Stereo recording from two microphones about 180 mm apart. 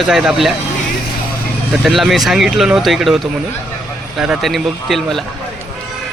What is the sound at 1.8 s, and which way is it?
Speech, centre (ahead or behind).